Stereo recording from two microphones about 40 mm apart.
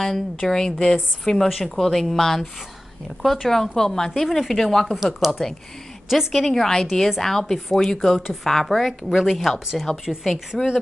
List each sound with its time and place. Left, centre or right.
0.0 s a woman's voice: centre
1.5 s a woman's voice: centre
4.9 s speech: centre
6.4 s a woman's voice: centre